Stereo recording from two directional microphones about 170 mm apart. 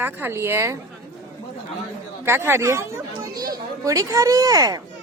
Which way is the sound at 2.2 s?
15° right (ahead or behind).